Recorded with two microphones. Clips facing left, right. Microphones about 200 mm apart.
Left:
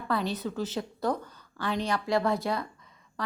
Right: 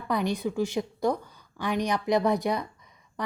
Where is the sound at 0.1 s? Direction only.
15° right (ahead or behind).